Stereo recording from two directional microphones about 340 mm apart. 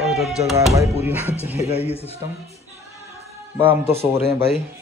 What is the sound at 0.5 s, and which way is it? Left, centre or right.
Speech, centre.